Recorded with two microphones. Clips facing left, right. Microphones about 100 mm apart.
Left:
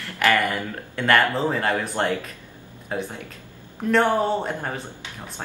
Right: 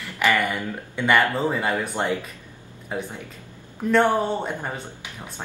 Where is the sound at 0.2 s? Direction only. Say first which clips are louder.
Left 1 dB; 15° right (ahead or behind).